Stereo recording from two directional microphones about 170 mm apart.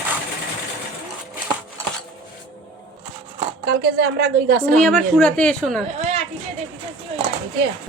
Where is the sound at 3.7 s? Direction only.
65° right (ahead or behind).